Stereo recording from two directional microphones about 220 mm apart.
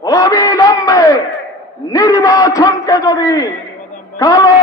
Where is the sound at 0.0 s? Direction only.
15° left (ahead or behind).